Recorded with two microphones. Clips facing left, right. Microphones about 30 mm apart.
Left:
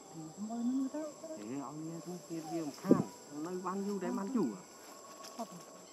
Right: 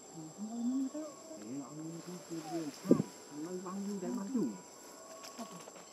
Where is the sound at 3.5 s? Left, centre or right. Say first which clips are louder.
Left 4 dB; left.